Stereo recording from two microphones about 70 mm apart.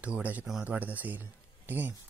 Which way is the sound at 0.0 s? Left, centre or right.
Right.